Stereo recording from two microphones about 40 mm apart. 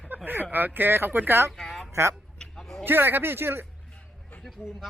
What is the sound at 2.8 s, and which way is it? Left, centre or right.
Speech, right.